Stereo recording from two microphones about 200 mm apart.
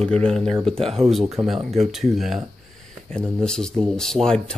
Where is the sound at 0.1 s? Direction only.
5° left (ahead or behind).